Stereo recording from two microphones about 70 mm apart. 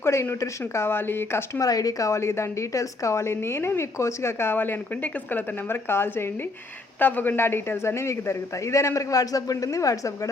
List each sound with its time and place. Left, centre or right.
0.0 s a man's voice: left
1.6 s a woman's voice: left